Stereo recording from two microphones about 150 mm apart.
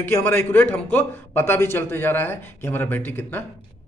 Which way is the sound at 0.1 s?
15° left (ahead or behind).